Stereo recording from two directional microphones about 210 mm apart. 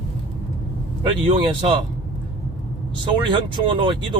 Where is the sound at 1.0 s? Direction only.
25° right (ahead or behind).